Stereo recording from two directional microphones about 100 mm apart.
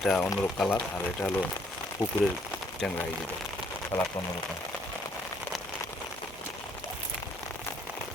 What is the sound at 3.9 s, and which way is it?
Speech, 40° left (ahead or behind).